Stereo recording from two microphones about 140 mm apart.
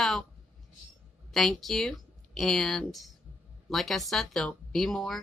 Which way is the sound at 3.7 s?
Centre (ahead or behind).